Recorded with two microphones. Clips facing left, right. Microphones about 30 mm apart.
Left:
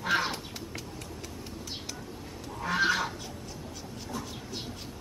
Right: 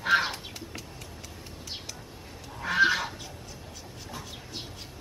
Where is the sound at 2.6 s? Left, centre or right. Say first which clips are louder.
Right 3 dB; centre.